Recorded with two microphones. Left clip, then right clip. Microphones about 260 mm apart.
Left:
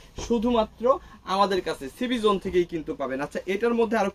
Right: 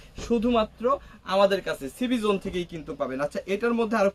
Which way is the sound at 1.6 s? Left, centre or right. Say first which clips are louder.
Even; centre.